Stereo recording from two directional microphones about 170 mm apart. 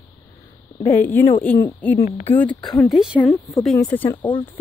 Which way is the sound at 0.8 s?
10° left (ahead or behind).